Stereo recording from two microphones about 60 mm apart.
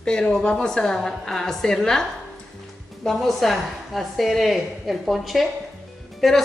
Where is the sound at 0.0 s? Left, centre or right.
Centre.